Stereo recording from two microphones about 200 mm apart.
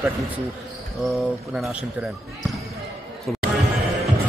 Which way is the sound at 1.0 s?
Centre (ahead or behind).